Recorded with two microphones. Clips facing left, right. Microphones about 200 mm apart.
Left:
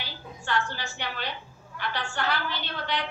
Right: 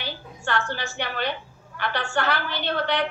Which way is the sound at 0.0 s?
60° right (ahead or behind).